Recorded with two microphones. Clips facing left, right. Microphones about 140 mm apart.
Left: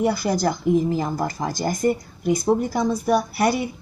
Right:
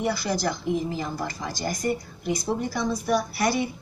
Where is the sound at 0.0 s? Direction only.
45° left (ahead or behind).